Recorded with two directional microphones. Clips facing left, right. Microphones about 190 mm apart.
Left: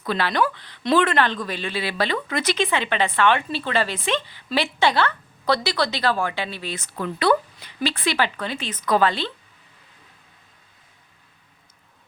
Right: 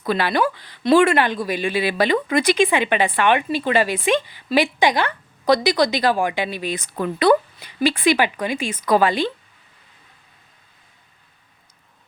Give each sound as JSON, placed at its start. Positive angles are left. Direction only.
{"t": 0.0, "sound": "a woman's voice", "side_deg": -10}